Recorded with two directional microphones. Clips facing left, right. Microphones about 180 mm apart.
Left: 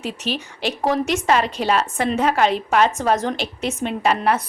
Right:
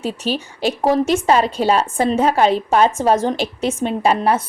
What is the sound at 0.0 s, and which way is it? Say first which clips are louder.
A woman's voice: right 4 dB; 30° right (ahead or behind).